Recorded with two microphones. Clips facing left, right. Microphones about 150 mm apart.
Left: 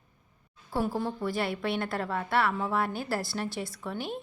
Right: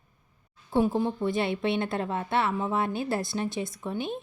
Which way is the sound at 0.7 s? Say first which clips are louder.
Right 5 dB; 20° right (ahead or behind).